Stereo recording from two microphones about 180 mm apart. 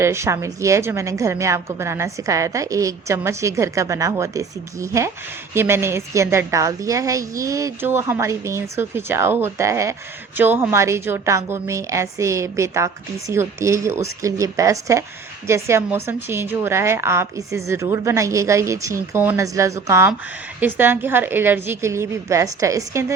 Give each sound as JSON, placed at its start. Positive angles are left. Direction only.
{"t": 0.0, "sound": "a woman's voice", "side_deg": -15}